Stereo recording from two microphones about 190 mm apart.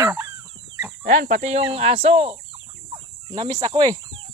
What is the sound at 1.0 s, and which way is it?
Speech, 40° right (ahead or behind).